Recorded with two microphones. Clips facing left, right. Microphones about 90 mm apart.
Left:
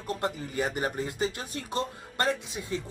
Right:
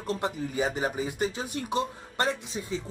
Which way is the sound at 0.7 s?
5° right (ahead or behind).